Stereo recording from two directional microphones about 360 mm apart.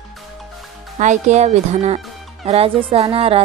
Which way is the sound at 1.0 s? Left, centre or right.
Centre.